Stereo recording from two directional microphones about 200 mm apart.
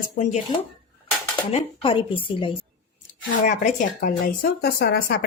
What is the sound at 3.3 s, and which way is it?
Speech, 40° left (ahead or behind).